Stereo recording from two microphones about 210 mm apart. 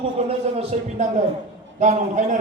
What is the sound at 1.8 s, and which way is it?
Speech, 35° right (ahead or behind).